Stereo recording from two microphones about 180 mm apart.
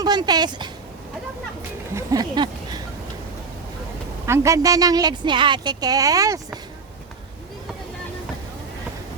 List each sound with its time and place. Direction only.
0.0 s a woman's voice: 25° right (ahead or behind)
1.9 s a sound: 15° right (ahead or behind)
4.3 s a woman's voice: 15° right (ahead or behind)